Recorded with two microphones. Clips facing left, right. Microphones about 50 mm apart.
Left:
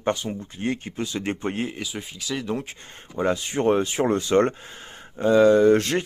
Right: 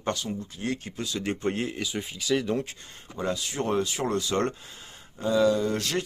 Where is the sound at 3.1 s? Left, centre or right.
Left.